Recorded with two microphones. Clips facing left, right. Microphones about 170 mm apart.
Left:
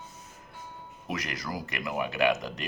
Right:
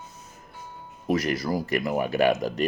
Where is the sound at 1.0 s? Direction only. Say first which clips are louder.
Right 10 dB; 30° right (ahead or behind).